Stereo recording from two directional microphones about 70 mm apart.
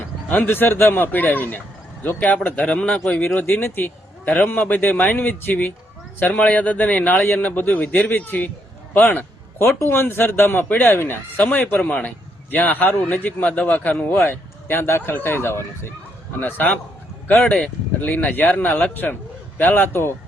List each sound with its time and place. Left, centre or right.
0.0 s a man's voice: left
2.6 s a man's voice: centre
3.2 s a man's voice: left
16.4 s a man's voice: left
17.4 s a man's voice: centre
18.0 s a man's voice: left